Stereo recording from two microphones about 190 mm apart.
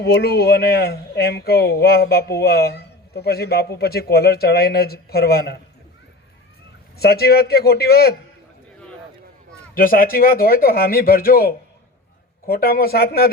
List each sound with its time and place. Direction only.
0.0 s a man's voice: 60° left (ahead or behind)
7.0 s a man's voice: 55° left (ahead or behind)
9.7 s a man's voice: 50° left (ahead or behind)